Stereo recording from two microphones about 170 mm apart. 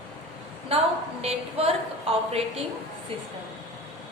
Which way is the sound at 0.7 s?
35° right (ahead or behind).